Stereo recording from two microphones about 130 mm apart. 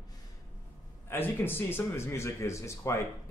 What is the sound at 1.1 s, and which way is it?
Speech, 15° left (ahead or behind).